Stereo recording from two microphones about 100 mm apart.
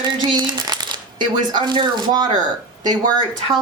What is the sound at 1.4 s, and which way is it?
Speech, 50° right (ahead or behind).